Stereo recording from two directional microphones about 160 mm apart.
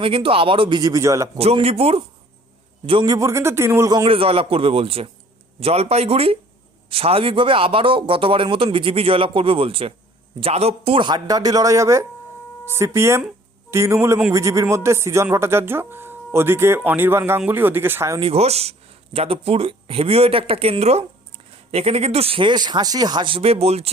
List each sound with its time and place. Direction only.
0.0 s speech: 35° right (ahead or behind); by 1.3 s 20° right (ahead or behind)
1.4 s speech: 40° right (ahead or behind)
3.2 s speech: 15° right (ahead or behind)
4.0 s a man's voice: 35° right (ahead or behind); by 18.2 s 15° right (ahead or behind)
18.2 s speech: 40° right (ahead or behind)